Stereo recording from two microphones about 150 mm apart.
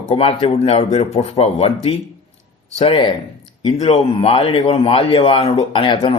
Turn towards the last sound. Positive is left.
turn(degrees=35)  # may be behind; listen again after turning